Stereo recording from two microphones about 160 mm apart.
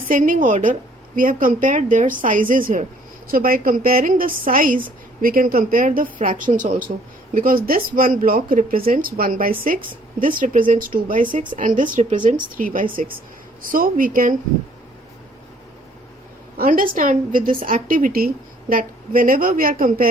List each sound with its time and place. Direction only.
0.1 s a woman's voice: 55° right (ahead or behind)
16.6 s a woman's voice: 60° right (ahead or behind)